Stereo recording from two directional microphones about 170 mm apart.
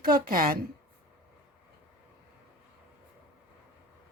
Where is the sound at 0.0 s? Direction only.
55° right (ahead or behind).